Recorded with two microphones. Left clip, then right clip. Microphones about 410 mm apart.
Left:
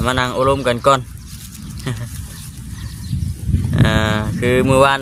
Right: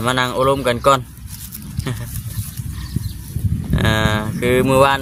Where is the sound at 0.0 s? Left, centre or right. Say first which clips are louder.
Even; right.